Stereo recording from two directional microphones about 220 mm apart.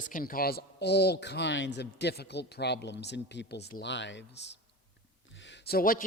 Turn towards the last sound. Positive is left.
turn(degrees=40)  # may be behind; listen again after turning